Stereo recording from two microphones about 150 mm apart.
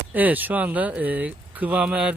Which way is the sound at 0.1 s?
10° right (ahead or behind).